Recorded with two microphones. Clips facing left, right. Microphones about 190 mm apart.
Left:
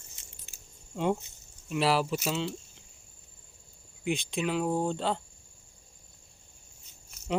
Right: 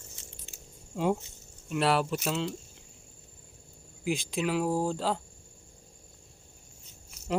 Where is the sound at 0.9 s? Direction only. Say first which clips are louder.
Right 1 dB; 5° right (ahead or behind).